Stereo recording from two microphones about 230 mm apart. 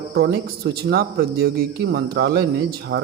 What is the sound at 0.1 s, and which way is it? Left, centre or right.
Speech, right.